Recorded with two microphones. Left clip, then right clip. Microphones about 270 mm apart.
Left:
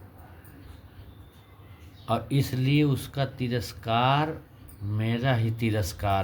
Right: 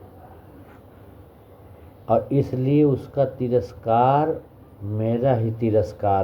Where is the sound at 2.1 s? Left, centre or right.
Left.